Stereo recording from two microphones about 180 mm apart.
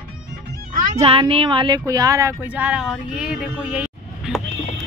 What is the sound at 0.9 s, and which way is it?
Speech, 30° right (ahead or behind).